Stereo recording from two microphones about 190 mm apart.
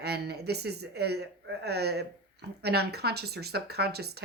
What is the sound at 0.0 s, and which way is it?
Speech, 60° right (ahead or behind).